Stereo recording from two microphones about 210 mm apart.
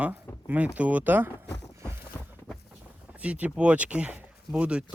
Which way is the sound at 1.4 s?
55° left (ahead or behind).